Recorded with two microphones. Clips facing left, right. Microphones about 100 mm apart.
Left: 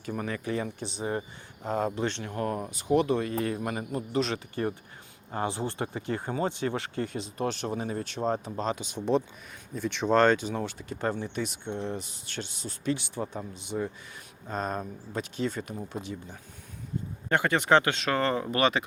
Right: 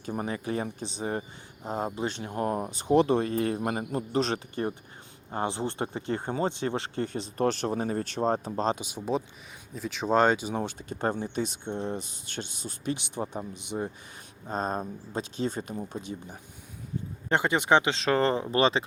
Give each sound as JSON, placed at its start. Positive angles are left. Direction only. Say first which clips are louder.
{"t": 0.0, "sound": "speech", "louder": "right 1 dB", "side_deg": -25}
{"t": 0.4, "sound": "speech", "louder": "even", "side_deg": -40}
{"t": 8.8, "sound": "speech", "louder": "left 3 dB", "side_deg": -10}
{"t": 10.6, "sound": "speech", "louder": "right 1 dB", "side_deg": -25}
{"t": 14.4, "sound": "speech", "louder": "right 2 dB", "side_deg": -30}
{"t": 17.2, "sound": "speech", "louder": "even", "side_deg": -20}
{"t": 17.9, "sound": "speech", "louder": "right 2 dB", "side_deg": -30}